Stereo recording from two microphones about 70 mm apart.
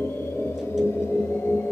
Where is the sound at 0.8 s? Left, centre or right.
Left.